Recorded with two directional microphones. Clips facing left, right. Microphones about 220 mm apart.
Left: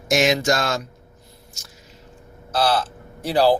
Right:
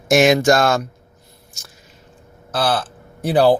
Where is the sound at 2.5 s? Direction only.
55° right (ahead or behind).